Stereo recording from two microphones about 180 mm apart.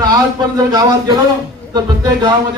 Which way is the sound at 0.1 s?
20° right (ahead or behind).